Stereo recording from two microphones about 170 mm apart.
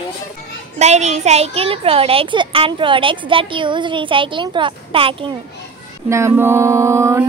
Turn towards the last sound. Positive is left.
turn(degrees=-15)  # may be behind; listen again after turning